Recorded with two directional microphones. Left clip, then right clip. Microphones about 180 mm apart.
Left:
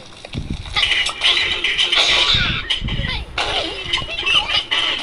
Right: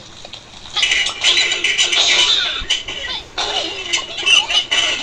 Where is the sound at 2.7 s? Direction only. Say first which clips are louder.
Right 2 dB; 5° right (ahead or behind).